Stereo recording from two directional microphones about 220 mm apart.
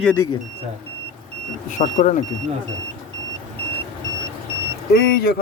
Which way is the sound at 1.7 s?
35° left (ahead or behind).